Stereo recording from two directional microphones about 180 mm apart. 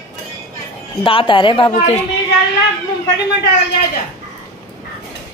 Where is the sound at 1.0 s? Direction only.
30° left (ahead or behind).